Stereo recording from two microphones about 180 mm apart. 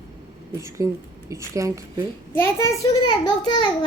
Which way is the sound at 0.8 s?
20° right (ahead or behind).